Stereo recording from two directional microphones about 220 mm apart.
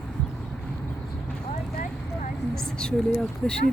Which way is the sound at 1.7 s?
35° left (ahead or behind).